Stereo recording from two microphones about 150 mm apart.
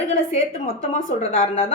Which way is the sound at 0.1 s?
55° left (ahead or behind).